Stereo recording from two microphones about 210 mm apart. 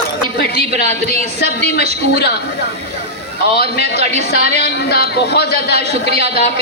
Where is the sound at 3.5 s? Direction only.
50° left (ahead or behind).